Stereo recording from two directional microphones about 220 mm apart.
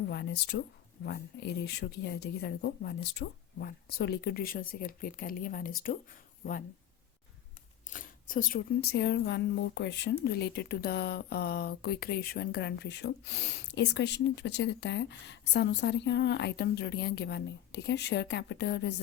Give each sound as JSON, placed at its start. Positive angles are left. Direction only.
{"t": 0.1, "sound": "speech", "side_deg": 50}
{"t": 7.9, "sound": "speech", "side_deg": 40}